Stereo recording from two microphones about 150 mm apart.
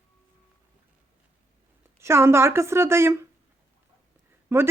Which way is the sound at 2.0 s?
15° right (ahead or behind).